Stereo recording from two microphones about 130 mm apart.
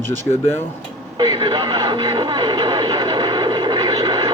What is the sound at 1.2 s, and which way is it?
Radio, 35° right (ahead or behind).